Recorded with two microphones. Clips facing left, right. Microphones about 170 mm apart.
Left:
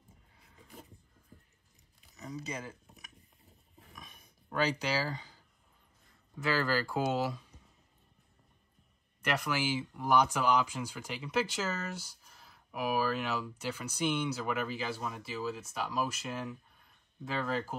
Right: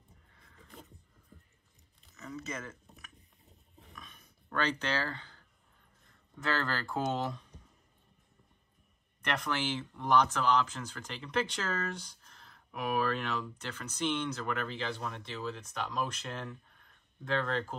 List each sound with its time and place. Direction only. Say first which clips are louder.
0.4 s vehicle: even; 5° left (ahead or behind)
2.5 s speech: even; 15° left (ahead or behind)
3.9 s a sound: even; 10° left (ahead or behind)
6.3 s speech: left 3 dB; 10° left (ahead or behind)
9.2 s speech: left 1 dB; 5° left (ahead or behind)